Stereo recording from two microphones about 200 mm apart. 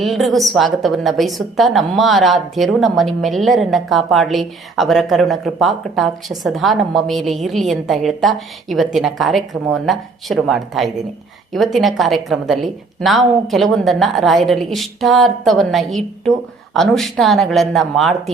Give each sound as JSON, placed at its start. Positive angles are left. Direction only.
{"t": 0.0, "sound": "a woman's voice", "side_deg": 0}